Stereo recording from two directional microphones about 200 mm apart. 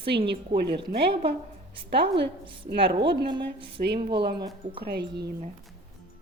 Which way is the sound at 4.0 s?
25° right (ahead or behind).